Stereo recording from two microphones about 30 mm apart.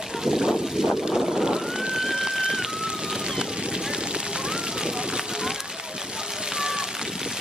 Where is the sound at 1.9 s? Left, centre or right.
Centre.